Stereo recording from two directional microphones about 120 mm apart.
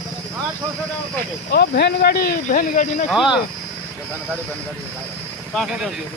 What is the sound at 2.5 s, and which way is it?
Speech, 90° left.